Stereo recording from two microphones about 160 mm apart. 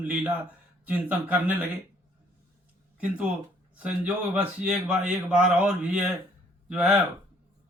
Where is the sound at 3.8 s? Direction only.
10° right (ahead or behind).